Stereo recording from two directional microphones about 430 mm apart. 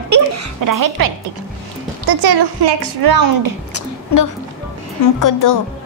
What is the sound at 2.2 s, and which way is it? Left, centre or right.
A woman's voice, right.